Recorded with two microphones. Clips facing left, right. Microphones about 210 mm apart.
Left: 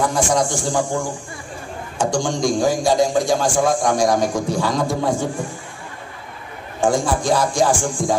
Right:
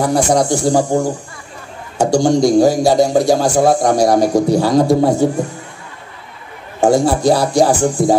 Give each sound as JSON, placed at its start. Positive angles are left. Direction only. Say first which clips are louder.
{"t": 0.0, "sound": "a man's voice", "louder": "right 5 dB", "side_deg": -40}
{"t": 2.0, "sound": "a man's voice", "louder": "right 8 dB", "side_deg": -40}
{"t": 6.8, "sound": "a man's voice", "louder": "right 6 dB", "side_deg": -40}